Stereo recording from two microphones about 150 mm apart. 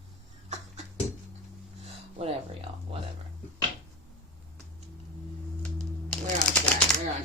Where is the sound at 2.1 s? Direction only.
40° right (ahead or behind).